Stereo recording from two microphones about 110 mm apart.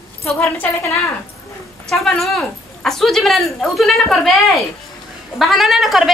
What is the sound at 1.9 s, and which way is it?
Speech, 5° left (ahead or behind).